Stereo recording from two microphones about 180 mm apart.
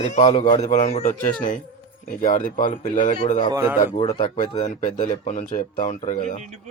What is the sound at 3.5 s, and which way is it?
Speech, 15° right (ahead or behind).